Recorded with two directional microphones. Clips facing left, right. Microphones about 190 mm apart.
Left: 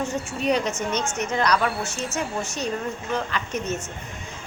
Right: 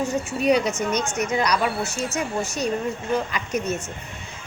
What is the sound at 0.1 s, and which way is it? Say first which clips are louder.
A woman's voice: right 3 dB; 10° right (ahead or behind).